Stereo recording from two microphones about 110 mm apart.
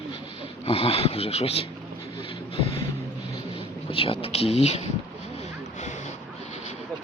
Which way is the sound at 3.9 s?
55° left (ahead or behind).